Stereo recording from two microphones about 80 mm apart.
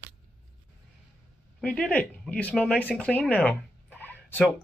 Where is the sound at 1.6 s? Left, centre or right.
Centre.